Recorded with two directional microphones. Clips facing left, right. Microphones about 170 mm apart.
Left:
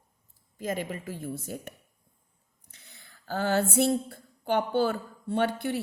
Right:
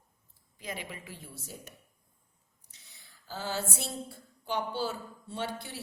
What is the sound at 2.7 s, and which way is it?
Speech, 55° left (ahead or behind).